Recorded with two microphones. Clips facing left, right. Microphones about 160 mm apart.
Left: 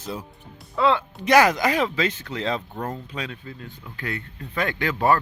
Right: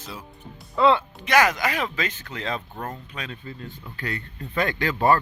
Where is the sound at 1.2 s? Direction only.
35° left (ahead or behind).